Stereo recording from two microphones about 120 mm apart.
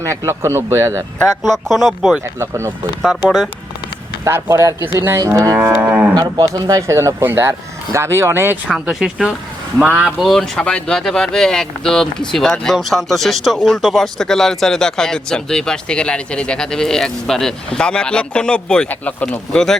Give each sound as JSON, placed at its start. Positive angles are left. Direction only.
{"t": 0.1, "sound": "speech", "side_deg": -25}
{"t": 1.4, "sound": "speech", "side_deg": 0}
{"t": 2.4, "sound": "speech", "side_deg": -20}
{"t": 3.2, "sound": "speech", "side_deg": 0}
{"t": 4.2, "sound": "speech", "side_deg": -20}
{"t": 6.5, "sound": "speech", "side_deg": -30}
{"t": 8.6, "sound": "speech", "side_deg": 0}
{"t": 10.2, "sound": "speech", "side_deg": 5}